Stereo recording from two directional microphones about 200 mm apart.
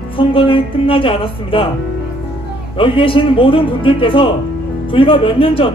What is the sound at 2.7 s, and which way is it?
Music, 25° left (ahead or behind).